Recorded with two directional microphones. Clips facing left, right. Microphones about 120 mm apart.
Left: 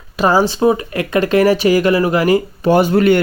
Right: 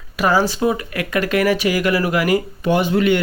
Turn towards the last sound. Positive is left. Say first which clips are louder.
# left 5 dB
turn(degrees=45)  # may be behind; listen again after turning